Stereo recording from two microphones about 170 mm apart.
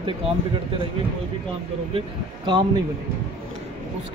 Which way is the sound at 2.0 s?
30° right (ahead or behind).